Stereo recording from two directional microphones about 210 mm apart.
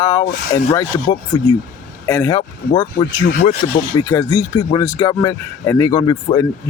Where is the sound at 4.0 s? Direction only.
15° left (ahead or behind).